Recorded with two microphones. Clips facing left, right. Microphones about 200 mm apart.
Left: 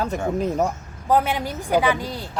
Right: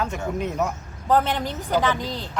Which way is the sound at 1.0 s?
10° left (ahead or behind).